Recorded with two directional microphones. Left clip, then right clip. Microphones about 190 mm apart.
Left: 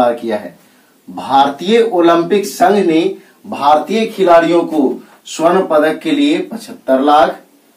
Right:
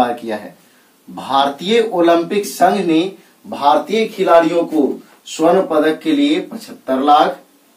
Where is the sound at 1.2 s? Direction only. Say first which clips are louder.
Left 4 dB; 15° right (ahead or behind).